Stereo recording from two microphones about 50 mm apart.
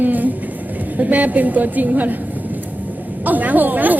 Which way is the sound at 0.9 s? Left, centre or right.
Right.